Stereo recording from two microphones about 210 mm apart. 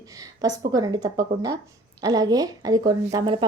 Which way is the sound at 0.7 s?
15° right (ahead or behind).